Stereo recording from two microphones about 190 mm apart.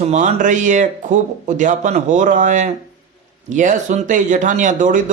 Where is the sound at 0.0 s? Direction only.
35° right (ahead or behind).